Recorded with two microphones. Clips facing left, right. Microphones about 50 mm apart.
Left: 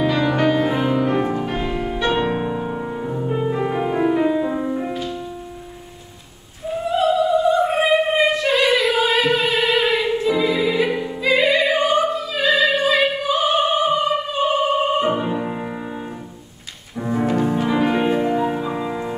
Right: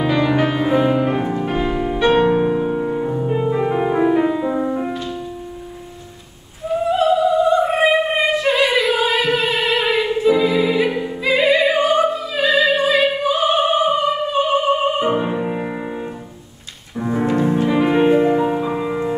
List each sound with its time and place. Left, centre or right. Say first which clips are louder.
0.0 s music: right 1 dB; centre
7.0 s opera: right 1 dB; centre
12.4 s opera: right 1 dB; centre
15.0 s music: right 1 dB; centre